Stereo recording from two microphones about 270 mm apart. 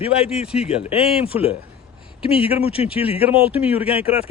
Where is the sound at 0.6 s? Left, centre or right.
Left.